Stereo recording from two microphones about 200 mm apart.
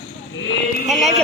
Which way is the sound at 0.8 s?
Centre (ahead or behind).